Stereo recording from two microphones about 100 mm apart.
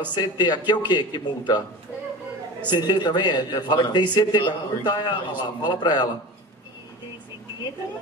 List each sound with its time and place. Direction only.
0.0 s a man's voice: 45° left (ahead or behind)
2.7 s a man's voice: 45° left (ahead or behind)